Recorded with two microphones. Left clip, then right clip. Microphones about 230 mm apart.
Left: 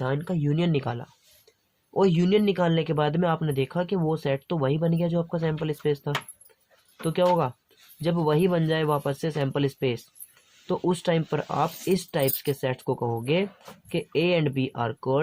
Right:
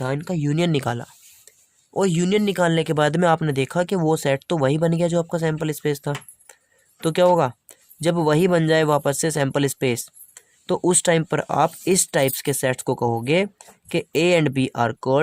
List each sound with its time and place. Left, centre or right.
0.0 s speech: right